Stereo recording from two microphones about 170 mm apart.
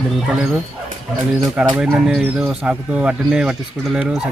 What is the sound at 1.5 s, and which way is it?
Speech, 5° right (ahead or behind).